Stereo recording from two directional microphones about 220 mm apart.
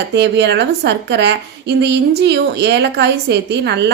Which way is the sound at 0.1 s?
50° right (ahead or behind).